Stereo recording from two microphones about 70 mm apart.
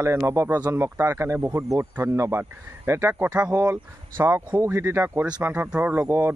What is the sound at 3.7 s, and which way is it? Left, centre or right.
Speech, right.